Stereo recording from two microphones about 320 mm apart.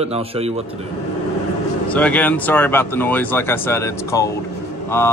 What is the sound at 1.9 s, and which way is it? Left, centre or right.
Speech, centre.